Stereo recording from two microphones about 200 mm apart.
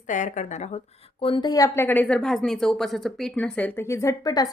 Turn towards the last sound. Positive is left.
turn(degrees=20)  # may be behind; listen again after turning